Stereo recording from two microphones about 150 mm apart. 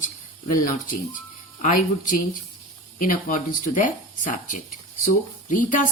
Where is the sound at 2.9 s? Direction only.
65° left (ahead or behind).